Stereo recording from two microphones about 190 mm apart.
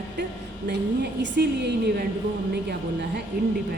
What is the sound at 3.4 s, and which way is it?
Speech, 60° right (ahead or behind).